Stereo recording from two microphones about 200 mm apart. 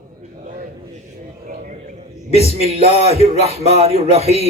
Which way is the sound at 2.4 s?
30° right (ahead or behind).